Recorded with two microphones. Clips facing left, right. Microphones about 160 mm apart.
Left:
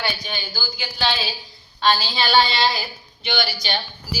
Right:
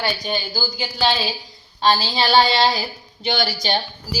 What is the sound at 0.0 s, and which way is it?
A woman's voice, 40° right (ahead or behind).